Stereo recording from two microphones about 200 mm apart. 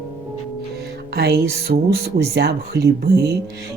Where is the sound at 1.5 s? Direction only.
55° right (ahead or behind).